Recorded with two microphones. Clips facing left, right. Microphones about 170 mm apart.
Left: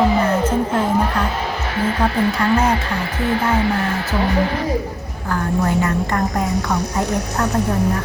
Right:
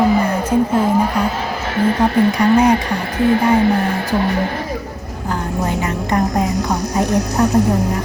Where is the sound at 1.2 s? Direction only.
10° right (ahead or behind).